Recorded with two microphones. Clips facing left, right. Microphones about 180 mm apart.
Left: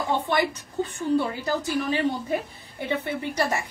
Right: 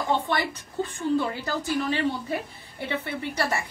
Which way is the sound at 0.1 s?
15° left (ahead or behind).